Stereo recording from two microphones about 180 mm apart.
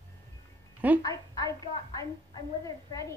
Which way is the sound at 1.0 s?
20° left (ahead or behind).